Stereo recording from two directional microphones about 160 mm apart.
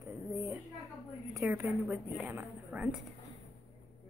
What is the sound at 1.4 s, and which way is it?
A woman's voice, 10° right (ahead or behind).